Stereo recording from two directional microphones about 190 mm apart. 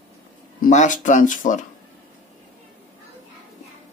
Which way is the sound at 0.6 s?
40° left (ahead or behind).